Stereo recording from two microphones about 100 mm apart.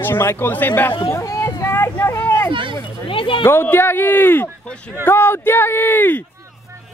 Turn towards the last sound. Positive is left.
turn(degrees=20)  # may be behind; listen again after turning